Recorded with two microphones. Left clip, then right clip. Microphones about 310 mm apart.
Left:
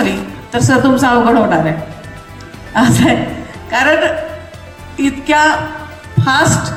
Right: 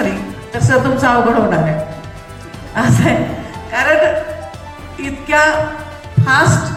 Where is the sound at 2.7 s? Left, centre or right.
Centre.